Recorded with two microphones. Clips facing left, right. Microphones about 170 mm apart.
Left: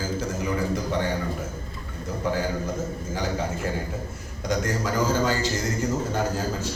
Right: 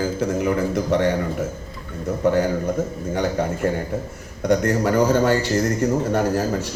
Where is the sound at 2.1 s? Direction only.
60° right (ahead or behind).